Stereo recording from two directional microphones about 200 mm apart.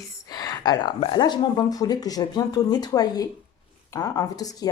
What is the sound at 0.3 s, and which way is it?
Speech, 20° left (ahead or behind).